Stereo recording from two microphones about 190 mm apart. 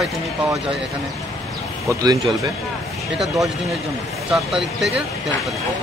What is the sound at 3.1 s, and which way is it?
Speech, centre (ahead or behind).